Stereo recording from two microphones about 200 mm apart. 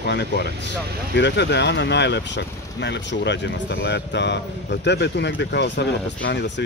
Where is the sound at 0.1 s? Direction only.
60° left (ahead or behind).